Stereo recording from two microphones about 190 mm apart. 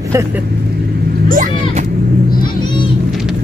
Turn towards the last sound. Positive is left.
turn(degrees=-45)  # may be behind; listen again after turning